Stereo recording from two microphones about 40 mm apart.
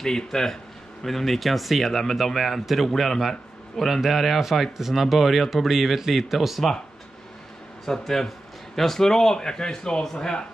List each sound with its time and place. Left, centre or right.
0.0 s a man's voice: centre
7.8 s a man's voice: centre